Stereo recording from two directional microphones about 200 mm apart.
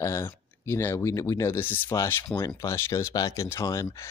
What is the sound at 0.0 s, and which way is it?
Speech, 15° left (ahead or behind).